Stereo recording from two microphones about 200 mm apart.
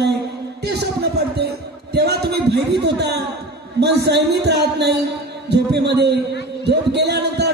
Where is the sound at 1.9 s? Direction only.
55° right (ahead or behind).